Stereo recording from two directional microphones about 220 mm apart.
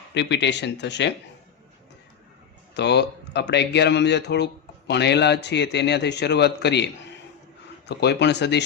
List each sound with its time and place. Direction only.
0.1 s a man's voice: 50° left (ahead or behind)
2.7 s a man's voice: 50° left (ahead or behind)
7.9 s a man's voice: 50° left (ahead or behind)